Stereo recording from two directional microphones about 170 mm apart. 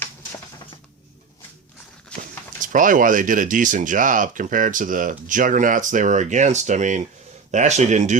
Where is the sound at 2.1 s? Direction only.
50° right (ahead or behind).